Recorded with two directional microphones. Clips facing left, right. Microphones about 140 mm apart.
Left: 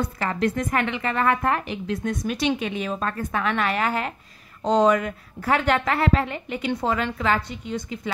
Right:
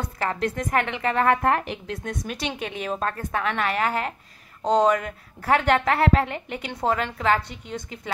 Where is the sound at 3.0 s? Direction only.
45° right (ahead or behind).